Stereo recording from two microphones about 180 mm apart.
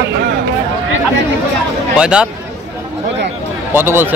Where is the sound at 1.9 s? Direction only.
5° right (ahead or behind).